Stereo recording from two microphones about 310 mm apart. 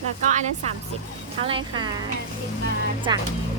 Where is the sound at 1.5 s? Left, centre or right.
Centre.